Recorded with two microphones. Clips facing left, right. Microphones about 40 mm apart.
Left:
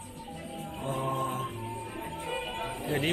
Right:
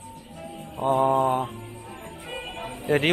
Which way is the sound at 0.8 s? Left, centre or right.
Right.